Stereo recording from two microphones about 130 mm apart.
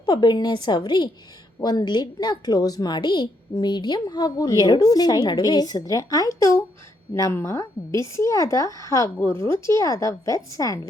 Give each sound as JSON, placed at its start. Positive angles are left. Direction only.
{"t": 0.0, "sound": "a woman's voice", "side_deg": 35}